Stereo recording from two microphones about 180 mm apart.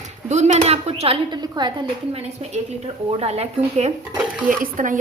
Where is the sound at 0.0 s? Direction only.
40° right (ahead or behind).